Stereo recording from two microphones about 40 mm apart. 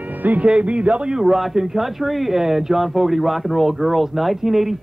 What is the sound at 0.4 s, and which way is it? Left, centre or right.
Speech, right.